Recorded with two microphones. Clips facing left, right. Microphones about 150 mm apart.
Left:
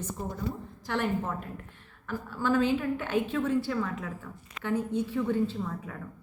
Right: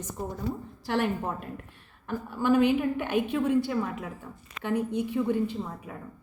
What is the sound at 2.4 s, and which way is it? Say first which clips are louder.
Speech: right 3 dB; 15° right (ahead or behind).